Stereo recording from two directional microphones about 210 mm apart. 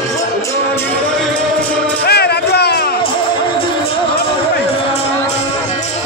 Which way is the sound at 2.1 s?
50° left (ahead or behind).